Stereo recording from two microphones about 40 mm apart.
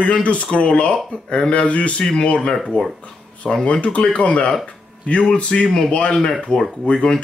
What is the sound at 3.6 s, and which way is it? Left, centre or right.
Speech, left.